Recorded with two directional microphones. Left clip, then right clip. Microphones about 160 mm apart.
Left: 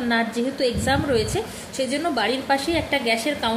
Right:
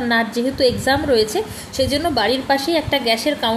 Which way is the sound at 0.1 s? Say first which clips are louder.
Right 4 dB; 20° right (ahead or behind).